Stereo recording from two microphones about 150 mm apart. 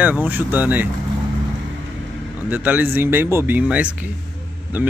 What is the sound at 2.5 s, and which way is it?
Speech, 10° right (ahead or behind).